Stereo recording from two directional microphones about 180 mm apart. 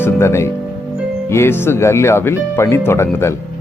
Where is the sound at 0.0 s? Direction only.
15° left (ahead or behind).